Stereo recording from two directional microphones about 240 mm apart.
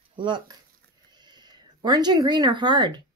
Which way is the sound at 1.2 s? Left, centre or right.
Centre.